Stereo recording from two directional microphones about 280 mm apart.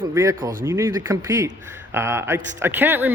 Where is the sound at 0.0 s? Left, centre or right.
Centre.